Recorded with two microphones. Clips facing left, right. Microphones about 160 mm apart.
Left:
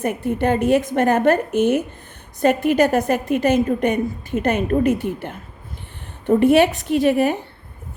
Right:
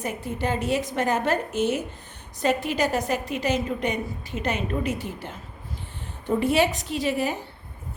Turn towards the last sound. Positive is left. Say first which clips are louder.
# left 9 dB
turn(degrees=60)  # may be behind; listen again after turning